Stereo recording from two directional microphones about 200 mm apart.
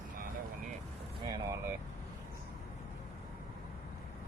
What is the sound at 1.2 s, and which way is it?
Speech, 20° right (ahead or behind).